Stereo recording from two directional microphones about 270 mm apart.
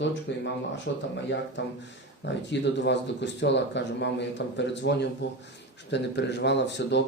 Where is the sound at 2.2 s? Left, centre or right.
Left.